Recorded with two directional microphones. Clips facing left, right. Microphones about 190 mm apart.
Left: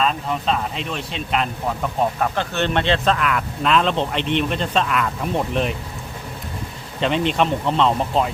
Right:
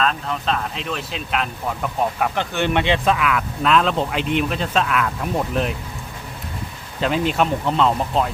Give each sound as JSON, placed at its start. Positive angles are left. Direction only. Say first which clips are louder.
{"t": 0.0, "sound": "speech", "louder": "left 1 dB", "side_deg": 5}
{"t": 7.0, "sound": "speech", "louder": "even", "side_deg": -5}